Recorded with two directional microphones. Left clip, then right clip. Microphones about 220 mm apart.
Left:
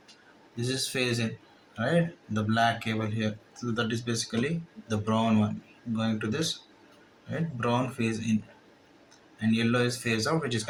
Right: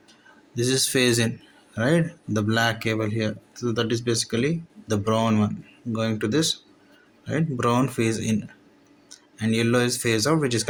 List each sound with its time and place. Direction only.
0.5 s speech: 55° right (ahead or behind)